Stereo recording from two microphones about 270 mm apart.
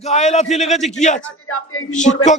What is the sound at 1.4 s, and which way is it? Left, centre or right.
Speech, left.